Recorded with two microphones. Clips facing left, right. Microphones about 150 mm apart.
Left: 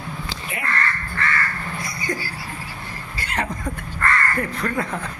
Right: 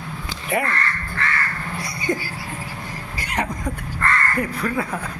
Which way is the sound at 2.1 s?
20° right (ahead or behind).